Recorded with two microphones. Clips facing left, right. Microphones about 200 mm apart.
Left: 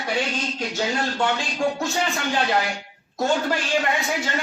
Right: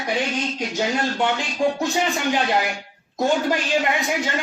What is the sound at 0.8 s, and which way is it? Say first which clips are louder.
Speech: right 2 dB; 20° right (ahead or behind).